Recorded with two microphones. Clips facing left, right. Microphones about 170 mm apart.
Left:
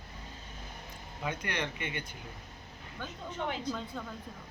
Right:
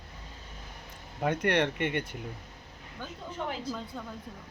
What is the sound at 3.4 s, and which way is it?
Speech, 5° right (ahead or behind).